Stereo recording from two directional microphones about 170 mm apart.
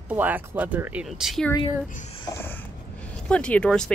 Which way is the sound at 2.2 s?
15° left (ahead or behind).